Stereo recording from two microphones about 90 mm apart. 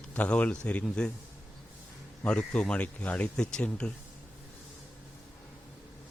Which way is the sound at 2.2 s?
15° left (ahead or behind).